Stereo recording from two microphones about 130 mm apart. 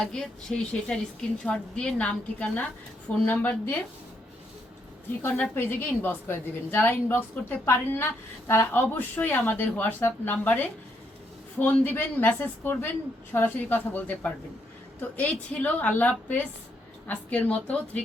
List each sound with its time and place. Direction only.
0.0 s a woman's voice: 5° left (ahead or behind)
5.2 s a woman's voice: 15° left (ahead or behind)